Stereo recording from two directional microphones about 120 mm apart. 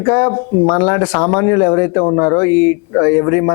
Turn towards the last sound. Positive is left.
turn(degrees=25)  # may be behind; listen again after turning